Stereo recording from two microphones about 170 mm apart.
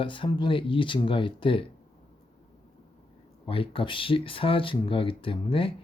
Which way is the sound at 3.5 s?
30° left (ahead or behind).